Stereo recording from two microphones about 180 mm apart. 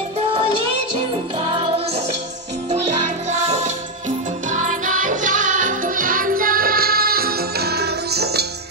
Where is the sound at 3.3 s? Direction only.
40° right (ahead or behind).